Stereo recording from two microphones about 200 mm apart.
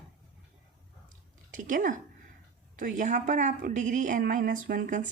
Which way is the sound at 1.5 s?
40° right (ahead or behind).